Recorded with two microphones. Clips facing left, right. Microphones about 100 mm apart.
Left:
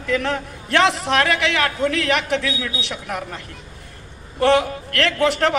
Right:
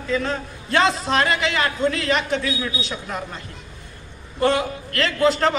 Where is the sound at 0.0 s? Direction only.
70° left (ahead or behind).